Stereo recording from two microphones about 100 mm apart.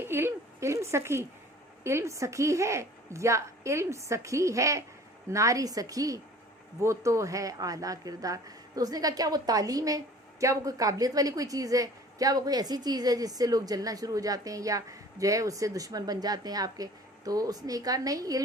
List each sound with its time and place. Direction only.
0.0 s a woman's voice: 25° right (ahead or behind)